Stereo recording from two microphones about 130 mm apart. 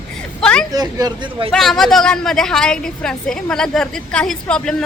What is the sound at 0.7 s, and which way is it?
Speech, 30° right (ahead or behind).